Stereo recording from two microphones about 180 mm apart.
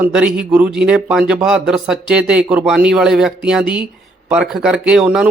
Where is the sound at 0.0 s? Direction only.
5° right (ahead or behind).